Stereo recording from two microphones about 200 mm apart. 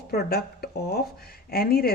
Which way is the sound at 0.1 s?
50° left (ahead or behind).